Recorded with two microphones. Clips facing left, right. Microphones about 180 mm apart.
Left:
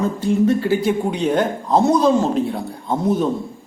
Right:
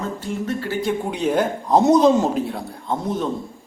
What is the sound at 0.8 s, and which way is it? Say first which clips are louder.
Speech: left 3 dB; 5° right (ahead or behind).